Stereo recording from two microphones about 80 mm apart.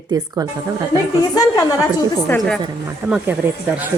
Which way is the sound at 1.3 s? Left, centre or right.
Left.